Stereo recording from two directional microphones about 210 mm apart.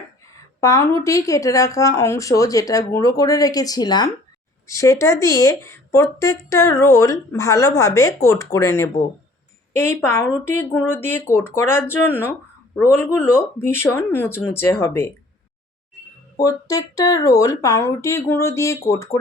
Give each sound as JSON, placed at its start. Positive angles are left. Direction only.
{"t": 0.6, "sound": "speech", "side_deg": 15}
{"t": 16.4, "sound": "speech", "side_deg": 15}